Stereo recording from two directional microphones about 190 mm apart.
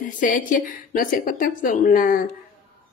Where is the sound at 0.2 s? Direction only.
45° left (ahead or behind).